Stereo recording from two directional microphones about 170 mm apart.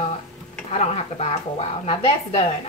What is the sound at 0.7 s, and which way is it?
A woman's voice, 40° left (ahead or behind).